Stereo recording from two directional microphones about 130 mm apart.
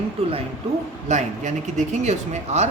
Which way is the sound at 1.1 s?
70° right (ahead or behind).